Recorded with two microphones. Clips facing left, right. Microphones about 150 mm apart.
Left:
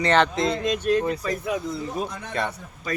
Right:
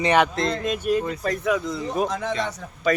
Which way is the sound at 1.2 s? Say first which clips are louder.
Right 4 dB; 65° right (ahead or behind).